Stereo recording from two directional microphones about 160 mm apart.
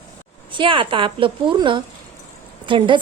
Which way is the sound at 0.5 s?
30° right (ahead or behind).